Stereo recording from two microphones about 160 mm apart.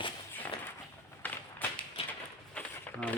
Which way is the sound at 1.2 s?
10° left (ahead or behind).